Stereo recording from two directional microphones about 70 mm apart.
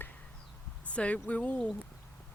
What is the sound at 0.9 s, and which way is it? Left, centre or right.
Speech, centre.